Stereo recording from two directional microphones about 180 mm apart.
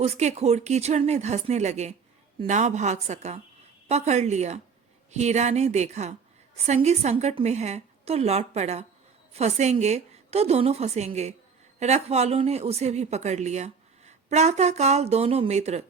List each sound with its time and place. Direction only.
0.0 s speech: 40° right (ahead or behind)